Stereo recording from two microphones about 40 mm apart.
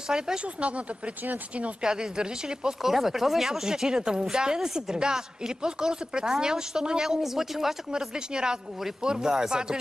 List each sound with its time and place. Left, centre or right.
0.1 s speech: centre
0.6 s speech: right
1.8 s speech: centre
2.8 s speech: centre
8.0 s speech: centre